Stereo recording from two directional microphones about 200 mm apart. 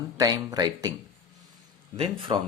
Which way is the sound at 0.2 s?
20° right (ahead or behind).